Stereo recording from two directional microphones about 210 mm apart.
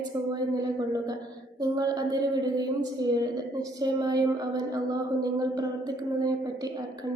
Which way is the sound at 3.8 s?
20° right (ahead or behind).